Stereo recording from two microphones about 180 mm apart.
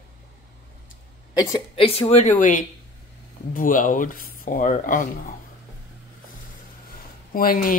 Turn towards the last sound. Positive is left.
turn(degrees=50)  # may be behind; listen again after turning